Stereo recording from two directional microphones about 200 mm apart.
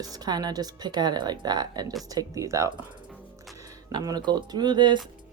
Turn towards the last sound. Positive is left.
turn(degrees=-20)  # may be behind; listen again after turning